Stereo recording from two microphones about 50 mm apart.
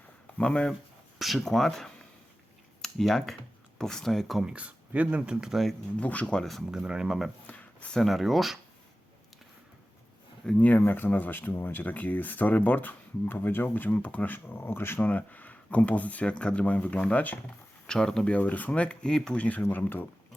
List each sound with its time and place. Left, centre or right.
0.3 s speech: left
1.2 s speech: centre
4.4 s speech: right
5.5 s speech: centre
6.0 s speech: left
6.4 s speech: centre
6.7 s speech: centre
7.4 s a sound: left
7.9 s speech: centre
10.6 s speech: left
17.8 s speech: centre
18.3 s speech: left
19.4 s speech: left